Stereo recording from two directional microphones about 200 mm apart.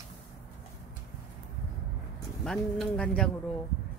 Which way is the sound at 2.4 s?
Centre (ahead or behind).